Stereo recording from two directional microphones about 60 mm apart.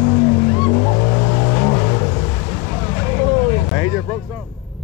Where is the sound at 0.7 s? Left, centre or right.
Left.